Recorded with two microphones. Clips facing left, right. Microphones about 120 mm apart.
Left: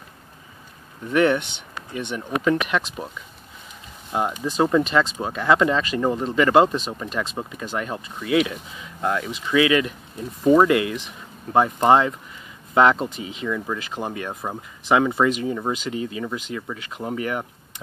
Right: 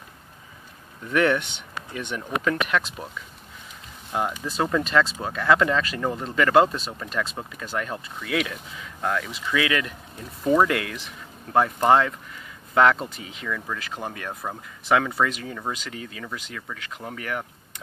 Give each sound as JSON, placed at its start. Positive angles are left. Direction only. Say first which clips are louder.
{"t": 1.1, "sound": "speech", "louder": "left 3 dB", "side_deg": 15}
{"t": 4.1, "sound": "speech", "louder": "left 4 dB", "side_deg": 10}